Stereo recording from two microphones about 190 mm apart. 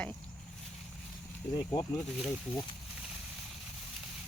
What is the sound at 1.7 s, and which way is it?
Speech, 20° left (ahead or behind).